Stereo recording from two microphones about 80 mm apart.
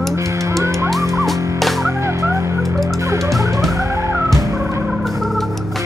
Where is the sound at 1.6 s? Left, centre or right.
Centre.